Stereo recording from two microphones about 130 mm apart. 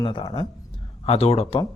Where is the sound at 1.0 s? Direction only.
50° left (ahead or behind).